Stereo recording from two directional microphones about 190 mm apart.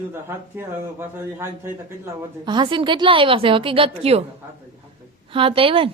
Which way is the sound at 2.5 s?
25° right (ahead or behind).